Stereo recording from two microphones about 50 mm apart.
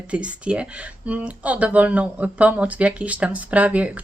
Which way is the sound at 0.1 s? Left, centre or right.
Right.